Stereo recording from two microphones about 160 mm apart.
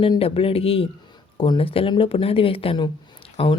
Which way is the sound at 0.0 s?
35° left (ahead or behind).